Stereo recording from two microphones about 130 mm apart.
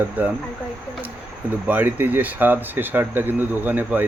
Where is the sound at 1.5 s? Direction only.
15° right (ahead or behind).